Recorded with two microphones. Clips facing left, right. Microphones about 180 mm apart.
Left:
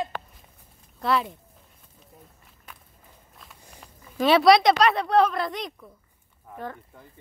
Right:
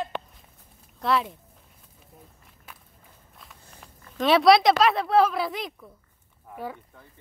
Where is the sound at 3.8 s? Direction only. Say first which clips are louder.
Left 2 dB; centre (ahead or behind).